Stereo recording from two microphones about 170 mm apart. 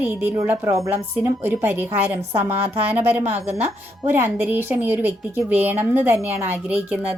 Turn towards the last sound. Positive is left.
turn(degrees=-10)  # may be behind; listen again after turning